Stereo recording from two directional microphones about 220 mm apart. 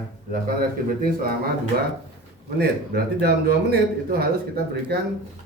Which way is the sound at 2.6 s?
50° right (ahead or behind).